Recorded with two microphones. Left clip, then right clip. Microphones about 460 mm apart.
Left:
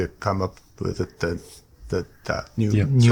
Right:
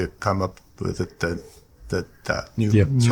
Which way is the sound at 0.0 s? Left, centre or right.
Centre.